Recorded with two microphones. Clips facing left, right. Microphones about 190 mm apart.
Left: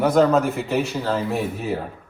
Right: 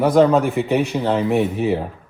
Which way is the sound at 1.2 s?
20° right (ahead or behind).